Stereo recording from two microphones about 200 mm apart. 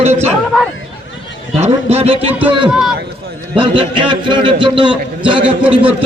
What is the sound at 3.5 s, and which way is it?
A man's voice, 25° right (ahead or behind).